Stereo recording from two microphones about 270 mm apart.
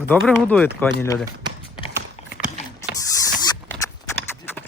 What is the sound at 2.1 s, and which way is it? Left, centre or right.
Clip-clop, left.